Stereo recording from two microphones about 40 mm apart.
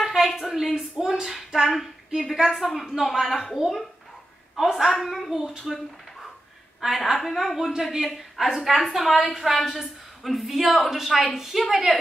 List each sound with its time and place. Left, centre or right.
0.0 s a sound: centre
0.7 s a woman's voice: centre
4.9 s a woman's voice: centre
5.3 s a woman's voice: centre
7.1 s a woman's voice: centre